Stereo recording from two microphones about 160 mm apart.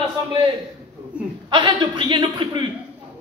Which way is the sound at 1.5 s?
30° right (ahead or behind).